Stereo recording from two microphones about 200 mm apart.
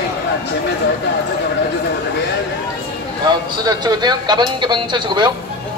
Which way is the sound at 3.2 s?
20° right (ahead or behind).